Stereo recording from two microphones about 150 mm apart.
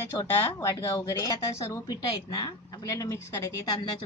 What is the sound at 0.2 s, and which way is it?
Speech, 20° left (ahead or behind).